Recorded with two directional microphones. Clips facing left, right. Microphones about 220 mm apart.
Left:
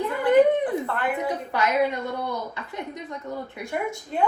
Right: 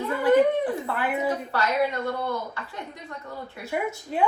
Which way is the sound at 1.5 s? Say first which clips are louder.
Left 4 dB; 15° left (ahead or behind).